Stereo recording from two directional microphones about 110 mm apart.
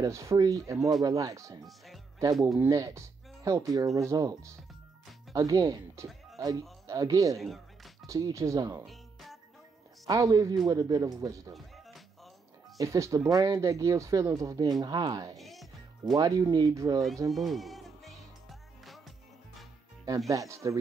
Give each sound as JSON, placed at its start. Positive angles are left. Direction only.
{"t": 0.0, "sound": "speech", "side_deg": -30}
{"t": 0.7, "sound": "speech", "side_deg": 0}
{"t": 1.0, "sound": "speech", "side_deg": -30}
{"t": 2.7, "sound": "speech", "side_deg": -30}
{"t": 7.3, "sound": "music", "side_deg": 0}
{"t": 8.1, "sound": "speech", "side_deg": -30}
{"t": 8.8, "sound": "music", "side_deg": 0}
{"t": 10.0, "sound": "speech", "side_deg": -30}
{"t": 11.5, "sound": "music", "side_deg": 0}
{"t": 12.7, "sound": "speech", "side_deg": -30}
{"t": 15.3, "sound": "music", "side_deg": 0}
{"t": 16.2, "sound": "speech", "side_deg": -35}
{"t": 17.3, "sound": "music", "side_deg": 0}
{"t": 20.2, "sound": "speech", "side_deg": -25}